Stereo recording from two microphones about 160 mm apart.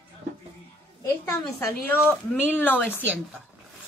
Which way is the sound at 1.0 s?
15° left (ahead or behind).